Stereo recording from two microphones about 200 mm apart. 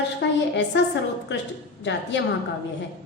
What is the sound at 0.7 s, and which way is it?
A woman's voice, 60° left (ahead or behind).